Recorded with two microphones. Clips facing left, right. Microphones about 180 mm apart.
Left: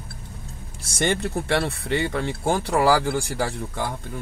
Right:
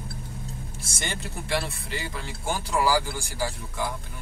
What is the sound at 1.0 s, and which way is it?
Speech, 60° left (ahead or behind).